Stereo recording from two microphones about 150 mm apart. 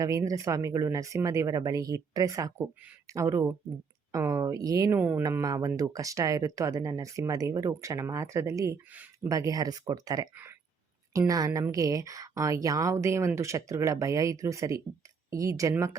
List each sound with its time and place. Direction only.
0.0 s speech: 25° right (ahead or behind)
4.9 s speech: 10° right (ahead or behind)
5.2 s speech: 20° right (ahead or behind)
9.3 s speech: 25° right (ahead or behind)